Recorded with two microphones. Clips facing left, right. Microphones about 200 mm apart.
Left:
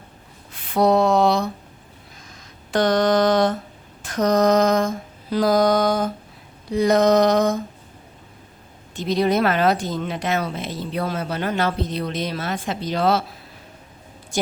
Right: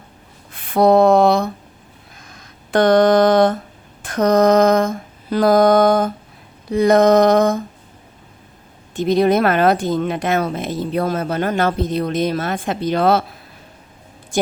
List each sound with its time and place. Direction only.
0.5 s a sound: 55° right (ahead or behind)
2.3 s speech: 55° right (ahead or behind)
4.0 s mantra: 55° right (ahead or behind)
6.7 s speech: 55° right (ahead or behind)
9.0 s speech: 50° right (ahead or behind)
14.3 s a sound: 55° right (ahead or behind)